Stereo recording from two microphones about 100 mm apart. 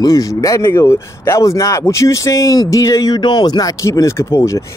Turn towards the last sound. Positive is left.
turn(degrees=35)  # may be behind; listen again after turning